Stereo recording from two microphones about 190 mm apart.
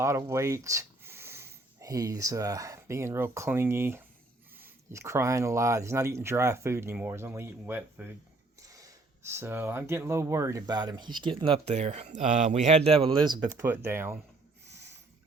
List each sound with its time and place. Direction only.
0.0 s speech: 15° right (ahead or behind)